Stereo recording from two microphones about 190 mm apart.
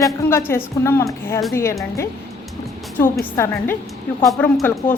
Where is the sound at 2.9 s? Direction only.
10° left (ahead or behind).